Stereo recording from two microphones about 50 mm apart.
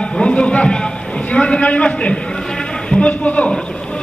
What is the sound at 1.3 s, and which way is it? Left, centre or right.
A man's voice, left.